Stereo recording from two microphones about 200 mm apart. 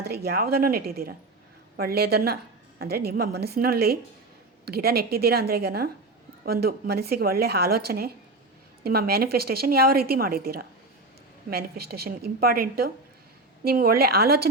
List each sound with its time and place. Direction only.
0.0 s a woman's voice: 55° right (ahead or behind)